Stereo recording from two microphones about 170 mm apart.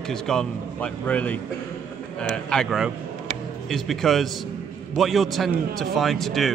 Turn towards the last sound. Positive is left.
turn(degrees=0)  # may be behind; listen again after turning